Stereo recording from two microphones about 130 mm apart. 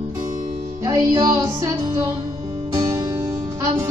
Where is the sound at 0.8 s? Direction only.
30° right (ahead or behind).